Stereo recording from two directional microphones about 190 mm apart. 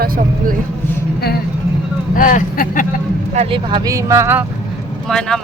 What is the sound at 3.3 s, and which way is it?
Speech, 30° right (ahead or behind).